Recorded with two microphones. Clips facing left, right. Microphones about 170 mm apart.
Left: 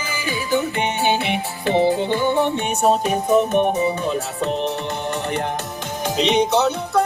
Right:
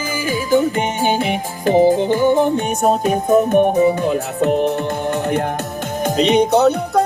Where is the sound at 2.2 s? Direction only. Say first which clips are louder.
Right 5 dB; 45° right (ahead or behind).